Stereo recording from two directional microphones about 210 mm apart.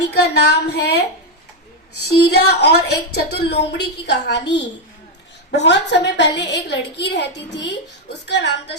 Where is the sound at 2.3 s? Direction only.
50° left (ahead or behind).